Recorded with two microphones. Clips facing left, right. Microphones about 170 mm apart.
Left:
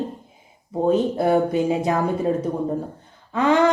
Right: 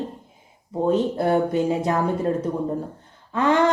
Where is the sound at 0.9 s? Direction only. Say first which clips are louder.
Left 2 dB; 15° left (ahead or behind).